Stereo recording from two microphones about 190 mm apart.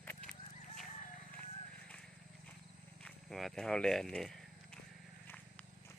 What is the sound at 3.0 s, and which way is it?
Speech, centre (ahead or behind).